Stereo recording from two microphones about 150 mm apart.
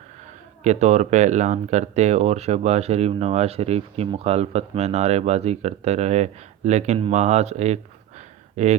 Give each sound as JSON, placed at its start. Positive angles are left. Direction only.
{"t": 0.6, "sound": "speech", "side_deg": -50}